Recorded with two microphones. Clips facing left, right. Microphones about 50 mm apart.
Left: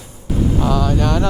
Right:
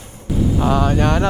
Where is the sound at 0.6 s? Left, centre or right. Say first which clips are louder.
Right 2 dB; right.